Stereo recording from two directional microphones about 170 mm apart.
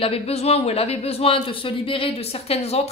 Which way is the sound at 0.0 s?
35° left (ahead or behind).